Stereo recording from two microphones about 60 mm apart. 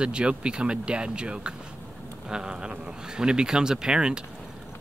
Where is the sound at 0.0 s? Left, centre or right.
Centre.